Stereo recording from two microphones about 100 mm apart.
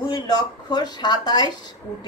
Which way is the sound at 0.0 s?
45° left (ahead or behind).